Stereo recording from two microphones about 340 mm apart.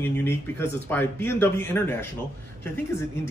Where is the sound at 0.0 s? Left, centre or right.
Centre.